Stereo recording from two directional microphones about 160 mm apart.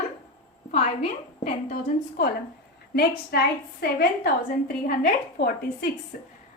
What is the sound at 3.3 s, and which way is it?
A woman's voice, 75° left (ahead or behind).